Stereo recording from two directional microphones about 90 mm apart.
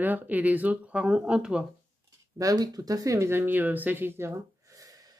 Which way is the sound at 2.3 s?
45° right (ahead or behind).